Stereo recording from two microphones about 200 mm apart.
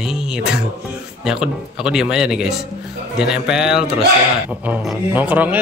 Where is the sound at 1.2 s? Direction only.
5° right (ahead or behind).